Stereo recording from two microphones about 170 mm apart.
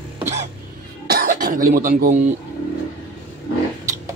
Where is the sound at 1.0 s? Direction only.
65° right (ahead or behind).